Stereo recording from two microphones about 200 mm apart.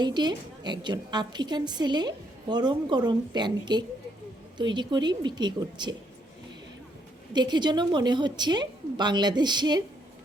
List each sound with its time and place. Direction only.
0.0 s a woman's voice: 20° right (ahead or behind)
7.3 s a woman's voice: 20° right (ahead or behind)